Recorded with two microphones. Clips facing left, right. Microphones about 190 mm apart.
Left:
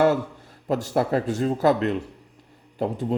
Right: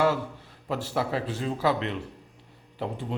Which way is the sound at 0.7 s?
45° left (ahead or behind).